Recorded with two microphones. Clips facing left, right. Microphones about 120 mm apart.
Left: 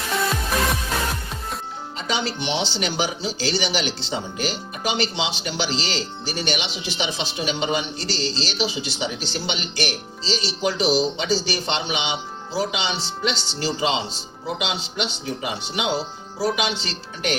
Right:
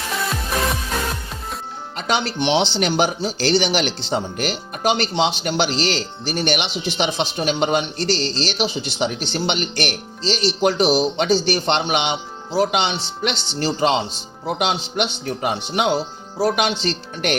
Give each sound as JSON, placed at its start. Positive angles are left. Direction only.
{"t": 2.0, "sound": "speech", "side_deg": -65}